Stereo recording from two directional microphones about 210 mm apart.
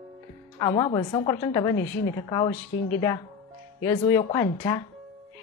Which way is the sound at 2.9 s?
15° left (ahead or behind).